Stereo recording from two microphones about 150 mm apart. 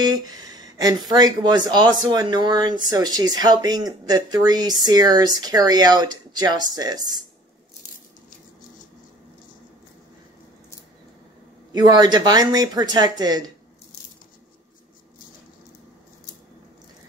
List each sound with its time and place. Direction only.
0.0 s speech: 25° right (ahead or behind)
11.7 s speech: 25° right (ahead or behind)